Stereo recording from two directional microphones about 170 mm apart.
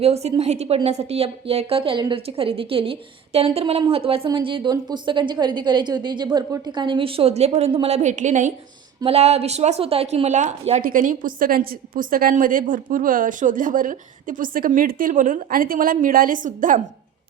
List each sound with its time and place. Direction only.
0.0 s a woman's voice: 40° right (ahead or behind)